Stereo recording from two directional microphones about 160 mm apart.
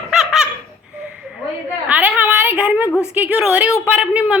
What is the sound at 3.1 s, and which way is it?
A woman's voice, 10° right (ahead or behind).